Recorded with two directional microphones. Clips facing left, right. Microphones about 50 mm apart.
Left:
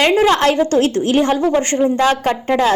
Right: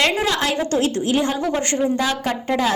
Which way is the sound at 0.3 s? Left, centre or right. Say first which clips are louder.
Left 7 dB; left.